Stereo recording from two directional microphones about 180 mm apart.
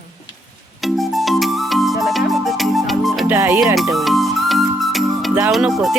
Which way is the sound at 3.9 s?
Centre (ahead or behind).